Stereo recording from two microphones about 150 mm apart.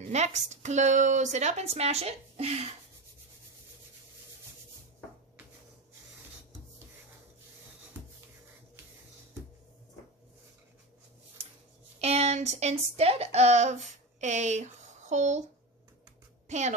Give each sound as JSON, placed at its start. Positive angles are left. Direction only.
{"t": 0.1, "sound": "a woman's voice", "side_deg": -50}
{"t": 12.0, "sound": "a woman's voice", "side_deg": -45}
{"t": 16.4, "sound": "a woman's voice", "side_deg": -50}